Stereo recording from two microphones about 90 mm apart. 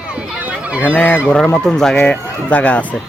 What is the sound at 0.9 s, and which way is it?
Speech, 15° left (ahead or behind).